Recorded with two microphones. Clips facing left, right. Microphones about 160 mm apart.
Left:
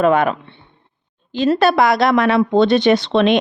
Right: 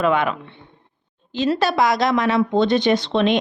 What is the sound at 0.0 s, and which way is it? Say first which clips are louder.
Speech: left 5 dB; 45° left (ahead or behind).